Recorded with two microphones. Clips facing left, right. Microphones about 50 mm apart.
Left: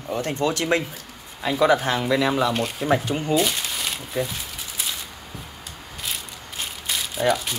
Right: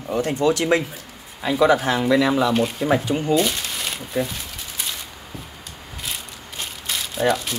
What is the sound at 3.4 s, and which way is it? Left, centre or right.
Crumpling, centre.